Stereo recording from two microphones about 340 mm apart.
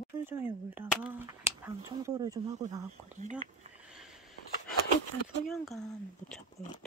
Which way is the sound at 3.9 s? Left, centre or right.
Centre.